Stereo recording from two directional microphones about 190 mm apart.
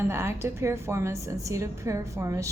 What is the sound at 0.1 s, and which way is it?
A woman's voice, 15° right (ahead or behind).